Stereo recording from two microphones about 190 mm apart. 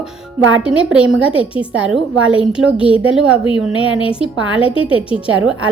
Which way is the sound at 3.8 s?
30° left (ahead or behind).